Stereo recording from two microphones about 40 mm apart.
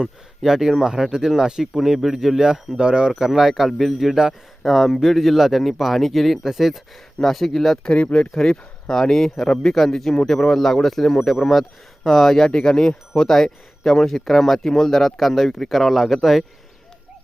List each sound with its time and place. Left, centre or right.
0.0 s speech: centre
1.7 s speech: centre; by 3.1 s right
3.2 s speech: centre
7.2 s speech: centre
7.9 s speech: left
8.4 s speech: centre
9.7 s speech: centre
12.5 s speech: left; by 16.4 s centre